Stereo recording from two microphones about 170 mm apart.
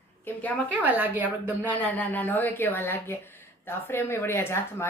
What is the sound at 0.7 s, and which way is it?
A woman's voice, 10° right (ahead or behind).